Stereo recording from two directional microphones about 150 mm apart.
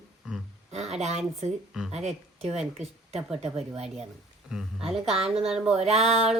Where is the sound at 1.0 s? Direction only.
45° right (ahead or behind).